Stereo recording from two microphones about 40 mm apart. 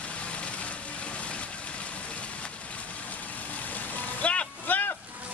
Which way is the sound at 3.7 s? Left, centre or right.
Left.